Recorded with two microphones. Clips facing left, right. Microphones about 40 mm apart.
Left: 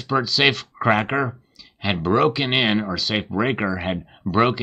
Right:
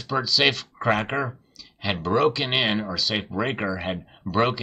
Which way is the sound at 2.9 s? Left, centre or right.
Centre.